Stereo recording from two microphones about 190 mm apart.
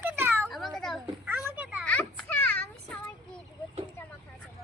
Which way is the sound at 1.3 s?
5° right (ahead or behind).